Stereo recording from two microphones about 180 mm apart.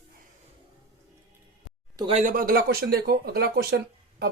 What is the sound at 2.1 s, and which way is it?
Speech, 35° right (ahead or behind).